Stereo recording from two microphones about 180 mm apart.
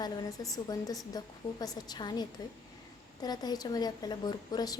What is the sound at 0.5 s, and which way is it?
A woman's voice, 20° left (ahead or behind).